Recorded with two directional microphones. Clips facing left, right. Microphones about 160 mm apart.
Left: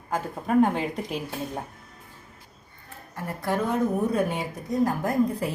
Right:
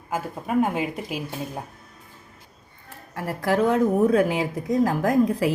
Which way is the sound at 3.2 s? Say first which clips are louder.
Right 5 dB; 90° right.